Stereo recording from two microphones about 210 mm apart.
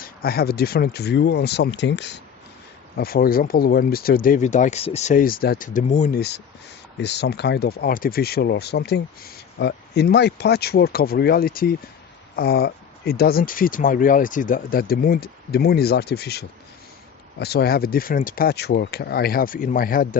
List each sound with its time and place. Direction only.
0.0 s speech: 45° left (ahead or behind)
3.0 s speech: 45° left (ahead or behind)